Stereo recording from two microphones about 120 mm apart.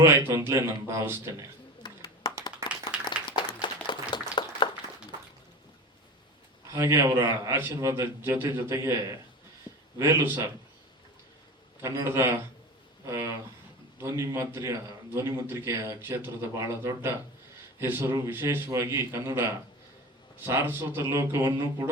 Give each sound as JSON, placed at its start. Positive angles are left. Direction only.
{"t": 0.0, "sound": "a man's voice", "side_deg": -20}
{"t": 1.8, "sound": "a sound", "side_deg": 40}
{"t": 3.1, "sound": "applause", "side_deg": 40}
{"t": 4.1, "sound": "a sound", "side_deg": 40}
{"t": 6.7, "sound": "a man's voice", "side_deg": -25}
{"t": 10.0, "sound": "a man's voice", "side_deg": -20}
{"t": 11.8, "sound": "a man's voice", "side_deg": -25}